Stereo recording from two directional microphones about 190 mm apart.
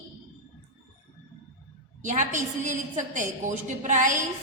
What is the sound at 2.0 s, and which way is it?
A woman's voice, 40° right (ahead or behind).